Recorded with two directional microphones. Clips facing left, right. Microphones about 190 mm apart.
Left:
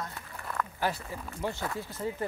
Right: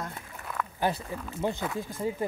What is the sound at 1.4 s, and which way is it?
Speech, 20° right (ahead or behind).